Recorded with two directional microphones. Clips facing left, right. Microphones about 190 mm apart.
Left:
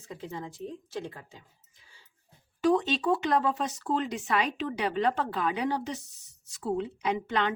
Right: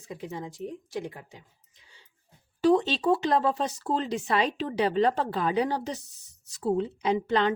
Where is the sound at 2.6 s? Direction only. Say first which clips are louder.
Right 3 dB; 30° right (ahead or behind).